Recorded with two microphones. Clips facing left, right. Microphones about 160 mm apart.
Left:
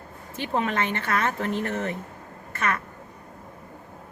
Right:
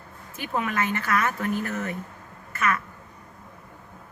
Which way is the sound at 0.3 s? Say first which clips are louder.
Left 2 dB; 30° left (ahead or behind).